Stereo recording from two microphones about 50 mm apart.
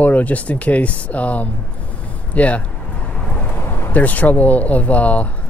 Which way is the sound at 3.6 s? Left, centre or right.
Left.